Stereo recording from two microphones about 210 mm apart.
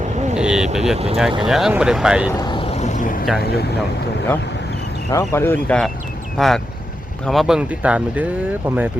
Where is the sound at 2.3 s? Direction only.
20° left (ahead or behind); by 3.3 s 40° left (ahead or behind).